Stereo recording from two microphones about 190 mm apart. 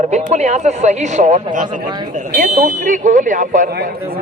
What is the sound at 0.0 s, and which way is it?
A man's voice, 35° right (ahead or behind).